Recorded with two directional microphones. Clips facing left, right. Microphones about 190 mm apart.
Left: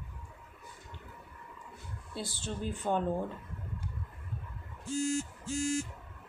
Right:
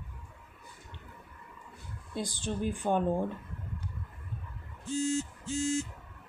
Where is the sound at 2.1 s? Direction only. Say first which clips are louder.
Right 4 dB; 15° right (ahead or behind).